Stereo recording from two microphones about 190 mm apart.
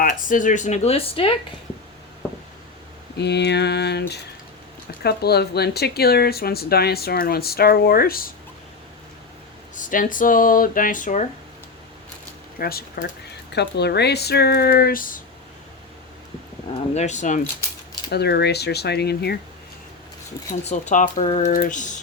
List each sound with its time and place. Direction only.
0.0 s speech: 45° left (ahead or behind); by 1.5 s 30° left (ahead or behind)
3.2 s speech: 65° left (ahead or behind)
9.7 s speech: 45° left (ahead or behind)
12.5 s speech: 55° left (ahead or behind)
16.9 s speech: 35° left (ahead or behind)
18.1 s speech: 60° left (ahead or behind)
20.5 s speech: 40° left (ahead or behind)